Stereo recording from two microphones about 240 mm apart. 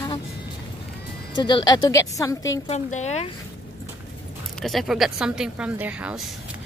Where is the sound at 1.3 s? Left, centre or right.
Centre.